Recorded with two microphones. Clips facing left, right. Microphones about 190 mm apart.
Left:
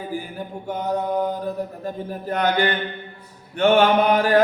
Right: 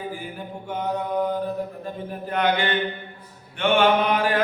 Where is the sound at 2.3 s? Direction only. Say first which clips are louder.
Left 1 dB; 40° left (ahead or behind).